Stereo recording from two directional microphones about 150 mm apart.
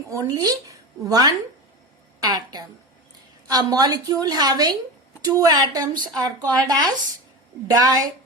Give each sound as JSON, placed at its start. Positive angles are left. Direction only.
{"t": 0.1, "sound": "speech", "side_deg": -25}